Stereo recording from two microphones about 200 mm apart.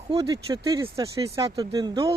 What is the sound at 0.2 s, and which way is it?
Speech, 20° right (ahead or behind).